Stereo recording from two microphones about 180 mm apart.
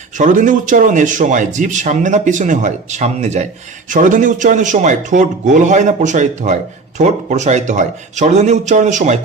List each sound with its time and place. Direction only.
0.2 s speech: 45° right (ahead or behind)